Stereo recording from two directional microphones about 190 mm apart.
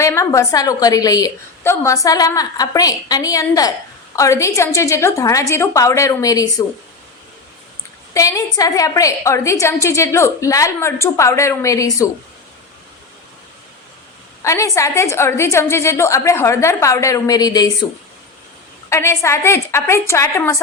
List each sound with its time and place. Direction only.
0.0 s a woman's voice: 15° left (ahead or behind)
8.1 s a woman's voice: 20° left (ahead or behind)
14.4 s a woman's voice: 15° left (ahead or behind)
18.9 s a woman's voice: 15° left (ahead or behind)